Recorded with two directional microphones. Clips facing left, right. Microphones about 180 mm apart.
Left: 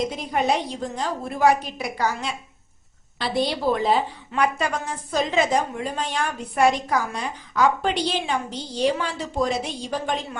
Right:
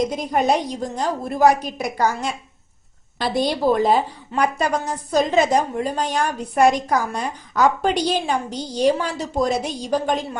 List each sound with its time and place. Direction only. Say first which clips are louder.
0.1 s a woman's voice: right 4 dB; 40° right (ahead or behind)